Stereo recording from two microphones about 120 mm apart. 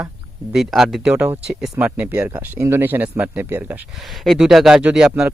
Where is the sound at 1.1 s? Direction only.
15° right (ahead or behind).